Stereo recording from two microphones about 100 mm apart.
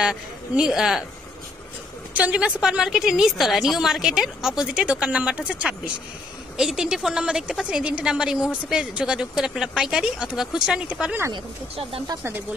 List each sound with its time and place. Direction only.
0.0 s speech: 5° right (ahead or behind)
2.1 s speech: 10° right (ahead or behind)